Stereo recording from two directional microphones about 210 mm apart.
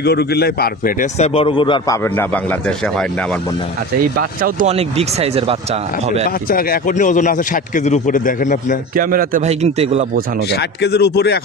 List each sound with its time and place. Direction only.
0.0 s a man's voice: 50° left (ahead or behind)
1.1 s speech: 30° left (ahead or behind)
2.1 s speech: 5° left (ahead or behind)
4.0 s speech: 40° right (ahead or behind)
6.5 s speech: 40° left (ahead or behind)
8.9 s a man's voice: 45° right (ahead or behind)
10.5 s a man's voice: 50° left (ahead or behind)